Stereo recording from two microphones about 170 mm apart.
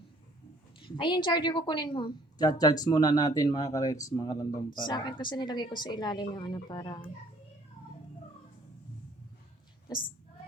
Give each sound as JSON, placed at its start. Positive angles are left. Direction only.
{"t": 0.8, "sound": "speech", "side_deg": 30}